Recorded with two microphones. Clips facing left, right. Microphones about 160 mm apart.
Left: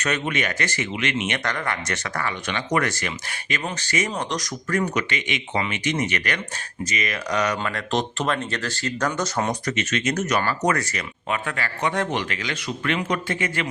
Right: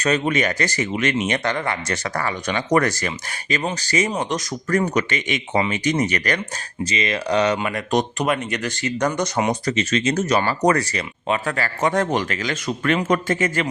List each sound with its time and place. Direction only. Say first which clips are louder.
0.0 s speech: right 5 dB; 35° right (ahead or behind)
4.2 s speech: right 3 dB; 25° right (ahead or behind)
4.7 s speech: right 4 dB; 40° right (ahead or behind)
6.9 s speech: right 5 dB; 30° right (ahead or behind)
9.6 s speech: right 4 dB; 30° right (ahead or behind)